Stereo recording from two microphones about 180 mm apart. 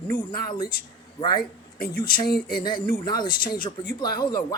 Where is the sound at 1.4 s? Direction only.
55° left (ahead or behind).